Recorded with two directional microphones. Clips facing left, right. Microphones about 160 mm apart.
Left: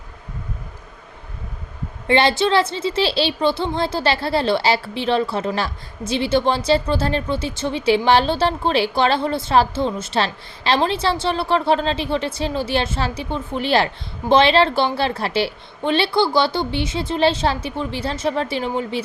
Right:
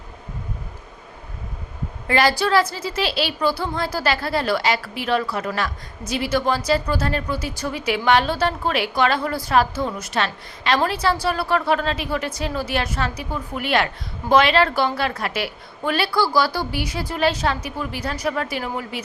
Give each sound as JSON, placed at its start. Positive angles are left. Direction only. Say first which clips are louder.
{"t": 2.0, "sound": "a woman's voice", "louder": "left 2 dB", "side_deg": 25}